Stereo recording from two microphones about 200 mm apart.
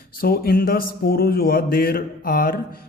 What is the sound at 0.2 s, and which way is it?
A man's voice, 50° left (ahead or behind).